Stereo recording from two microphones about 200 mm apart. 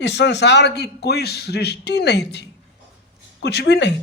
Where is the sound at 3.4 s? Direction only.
55° left (ahead or behind).